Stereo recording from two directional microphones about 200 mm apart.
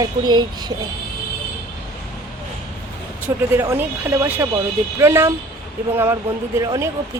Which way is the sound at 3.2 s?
10° right (ahead or behind).